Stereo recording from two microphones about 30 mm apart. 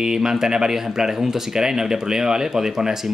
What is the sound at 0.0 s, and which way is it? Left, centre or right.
Speech, centre.